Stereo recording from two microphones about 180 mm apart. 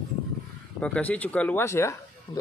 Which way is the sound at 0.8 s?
5° left (ahead or behind).